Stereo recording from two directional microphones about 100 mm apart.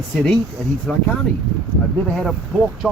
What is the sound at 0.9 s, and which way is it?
Speech, 10° left (ahead or behind).